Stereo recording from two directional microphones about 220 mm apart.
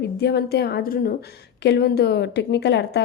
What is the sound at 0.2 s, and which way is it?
A woman's voice, 50° left (ahead or behind).